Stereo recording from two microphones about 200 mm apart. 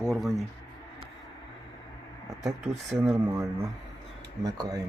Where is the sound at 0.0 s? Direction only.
Centre (ahead or behind).